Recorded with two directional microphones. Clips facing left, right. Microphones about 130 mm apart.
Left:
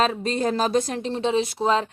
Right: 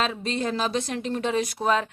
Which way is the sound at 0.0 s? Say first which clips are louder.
Left 4 dB; 40° left (ahead or behind).